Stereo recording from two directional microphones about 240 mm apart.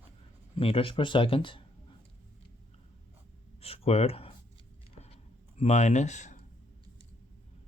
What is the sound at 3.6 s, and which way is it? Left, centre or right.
Speech, left.